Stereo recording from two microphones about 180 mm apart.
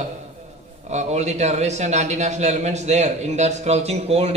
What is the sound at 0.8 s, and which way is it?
A man's voice, 40° right (ahead or behind).